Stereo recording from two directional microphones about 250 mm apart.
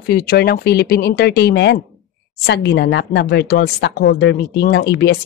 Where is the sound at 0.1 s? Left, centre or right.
Left.